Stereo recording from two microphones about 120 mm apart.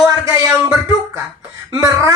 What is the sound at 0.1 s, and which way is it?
Music, 25° right (ahead or behind).